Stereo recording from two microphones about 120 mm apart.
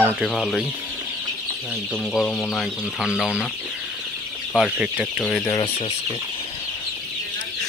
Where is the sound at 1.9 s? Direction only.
5° left (ahead or behind).